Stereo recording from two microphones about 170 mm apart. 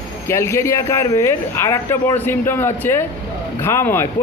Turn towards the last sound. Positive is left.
turn(degrees=15)  # may be behind; listen again after turning